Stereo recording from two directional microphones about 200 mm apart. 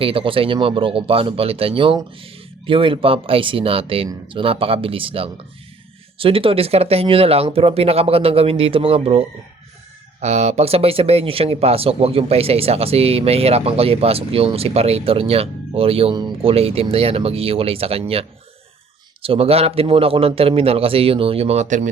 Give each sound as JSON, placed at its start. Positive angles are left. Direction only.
{"t": 0.0, "sound": "speech", "side_deg": -25}
{"t": 19.2, "sound": "speech", "side_deg": -30}